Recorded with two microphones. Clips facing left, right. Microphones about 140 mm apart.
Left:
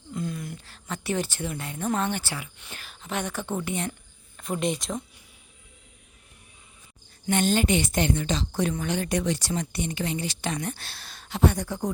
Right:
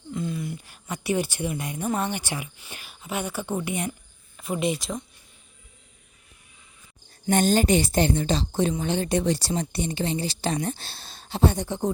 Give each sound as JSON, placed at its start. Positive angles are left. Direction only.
{"t": 0.1, "sound": "speech", "side_deg": 0}
{"t": 7.3, "sound": "speech", "side_deg": -40}